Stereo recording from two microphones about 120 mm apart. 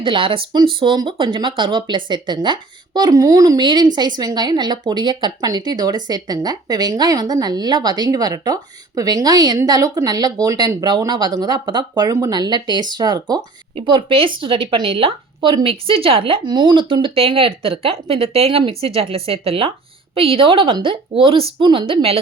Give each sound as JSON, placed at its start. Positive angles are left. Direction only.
{"t": 0.0, "sound": "speech", "side_deg": -45}
{"t": 13.8, "sound": "speech", "side_deg": -45}